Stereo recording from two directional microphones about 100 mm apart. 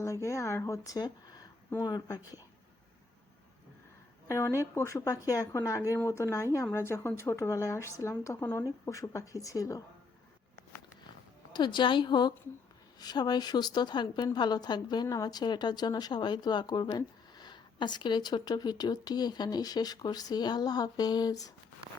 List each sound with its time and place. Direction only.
0.0 s speech: 30° left (ahead or behind)
4.3 s speech: 30° left (ahead or behind)
11.5 s speech: 50° left (ahead or behind)